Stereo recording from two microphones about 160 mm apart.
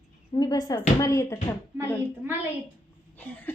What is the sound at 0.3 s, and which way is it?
Speech, 25° left (ahead or behind).